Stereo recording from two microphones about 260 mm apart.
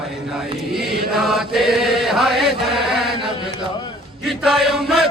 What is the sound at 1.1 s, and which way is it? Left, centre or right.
Chant, centre.